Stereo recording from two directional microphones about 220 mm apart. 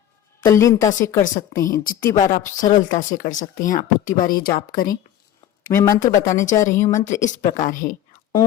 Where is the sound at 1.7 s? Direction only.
35° left (ahead or behind).